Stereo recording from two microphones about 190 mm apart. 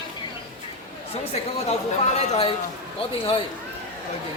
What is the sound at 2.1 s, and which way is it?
Speech, 35° left (ahead or behind).